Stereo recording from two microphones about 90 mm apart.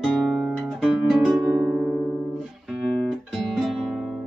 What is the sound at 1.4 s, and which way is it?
Music, 20° right (ahead or behind).